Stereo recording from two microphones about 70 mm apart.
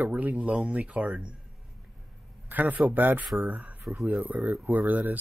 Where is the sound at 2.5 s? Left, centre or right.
Right.